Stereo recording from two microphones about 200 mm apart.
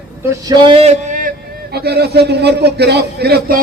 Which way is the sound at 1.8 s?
55° right (ahead or behind).